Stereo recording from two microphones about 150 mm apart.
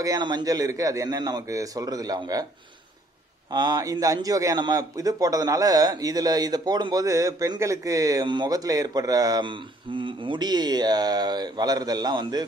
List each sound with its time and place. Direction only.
0.0 s a man's voice: 25° right (ahead or behind)
3.5 s a man's voice: 25° right (ahead or behind)